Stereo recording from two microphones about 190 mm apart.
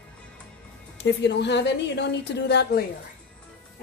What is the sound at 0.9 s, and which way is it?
A woman's voice, 65° left (ahead or behind).